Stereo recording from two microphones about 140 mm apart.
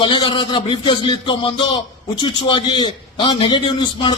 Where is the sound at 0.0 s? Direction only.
35° left (ahead or behind).